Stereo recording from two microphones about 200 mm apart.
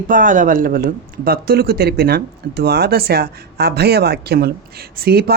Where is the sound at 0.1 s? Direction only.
40° right (ahead or behind).